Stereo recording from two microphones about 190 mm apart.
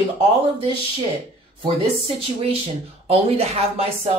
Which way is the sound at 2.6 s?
30° right (ahead or behind).